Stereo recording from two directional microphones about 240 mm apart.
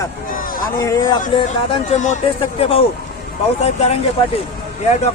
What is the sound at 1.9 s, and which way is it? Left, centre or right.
Speech, left.